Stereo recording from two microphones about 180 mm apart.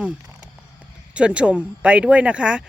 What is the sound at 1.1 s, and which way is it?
Speech, 5° right (ahead or behind).